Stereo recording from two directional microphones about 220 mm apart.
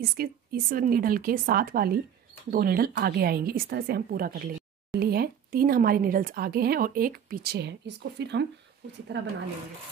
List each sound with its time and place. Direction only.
0.0 s a woman's voice: 45° right (ahead or behind)